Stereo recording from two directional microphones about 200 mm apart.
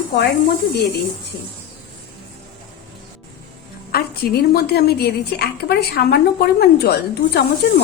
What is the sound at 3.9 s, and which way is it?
A woman's voice, 50° left (ahead or behind).